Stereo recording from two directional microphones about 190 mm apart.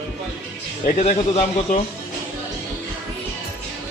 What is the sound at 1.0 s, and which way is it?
Speech, 35° left (ahead or behind).